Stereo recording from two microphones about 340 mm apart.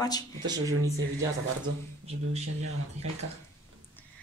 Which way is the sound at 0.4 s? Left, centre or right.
Centre.